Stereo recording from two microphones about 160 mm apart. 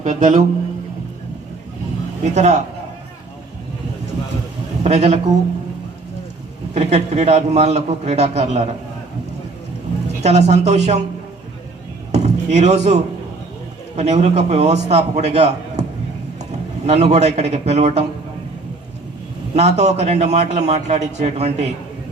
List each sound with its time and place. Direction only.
0.0 s a man's voice: 50° right (ahead or behind)
2.3 s a man's voice: 45° right (ahead or behind)
4.8 s a man's voice: 45° right (ahead or behind)
6.7 s a man's voice: 45° right (ahead or behind)
10.2 s a man's voice: 45° right (ahead or behind)
12.1 s a sound: 45° right (ahead or behind)
13.9 s a man's voice: 45° right (ahead or behind)
19.5 s a man's voice: 45° right (ahead or behind)